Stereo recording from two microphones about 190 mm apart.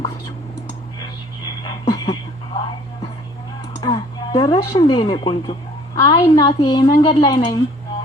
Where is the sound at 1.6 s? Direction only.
25° left (ahead or behind).